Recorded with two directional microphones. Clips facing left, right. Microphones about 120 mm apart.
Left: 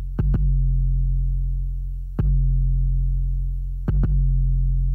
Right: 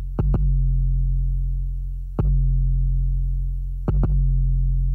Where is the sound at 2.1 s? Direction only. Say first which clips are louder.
Right 1 dB; 35° right (ahead or behind).